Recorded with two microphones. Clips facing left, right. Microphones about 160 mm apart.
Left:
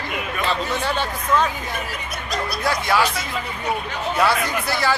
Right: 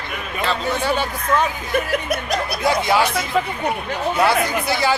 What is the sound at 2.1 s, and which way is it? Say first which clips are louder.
Snicker: right 5 dB; 60° right (ahead or behind).